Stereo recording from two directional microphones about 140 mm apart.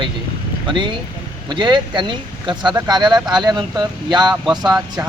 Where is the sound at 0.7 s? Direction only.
35° right (ahead or behind).